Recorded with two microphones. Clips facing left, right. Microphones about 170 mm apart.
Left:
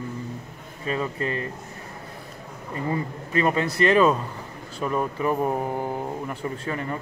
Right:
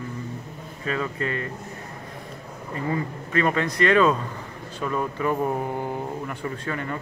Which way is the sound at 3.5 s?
5° left (ahead or behind).